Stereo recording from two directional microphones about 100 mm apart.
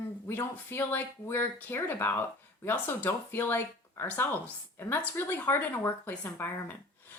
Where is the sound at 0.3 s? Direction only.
20° left (ahead or behind).